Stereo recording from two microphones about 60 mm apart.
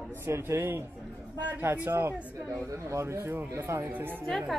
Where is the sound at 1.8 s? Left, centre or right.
Right.